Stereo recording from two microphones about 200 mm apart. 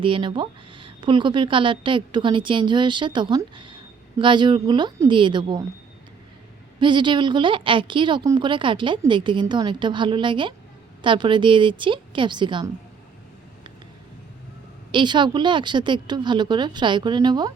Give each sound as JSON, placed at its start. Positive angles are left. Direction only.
{"t": 0.0, "sound": "a woman's voice", "side_deg": -25}
{"t": 6.7, "sound": "a woman's voice", "side_deg": -25}
{"t": 14.9, "sound": "a woman's voice", "side_deg": -20}